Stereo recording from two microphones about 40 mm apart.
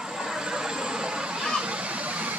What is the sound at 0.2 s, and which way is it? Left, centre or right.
Vehicle, centre.